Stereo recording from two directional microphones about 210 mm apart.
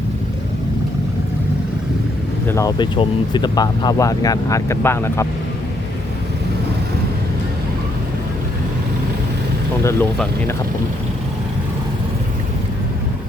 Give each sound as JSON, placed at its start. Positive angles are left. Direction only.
{"t": 2.5, "sound": "speech", "side_deg": 15}
{"t": 9.8, "sound": "speech", "side_deg": 10}